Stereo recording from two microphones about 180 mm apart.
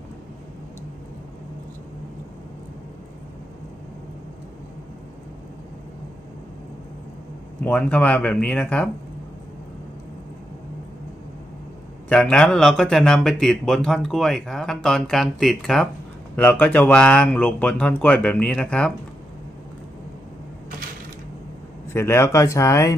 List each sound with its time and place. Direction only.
7.6 s speech: 10° left (ahead or behind)
12.1 s a man's voice: 5° left (ahead or behind)
21.9 s speech: 15° left (ahead or behind)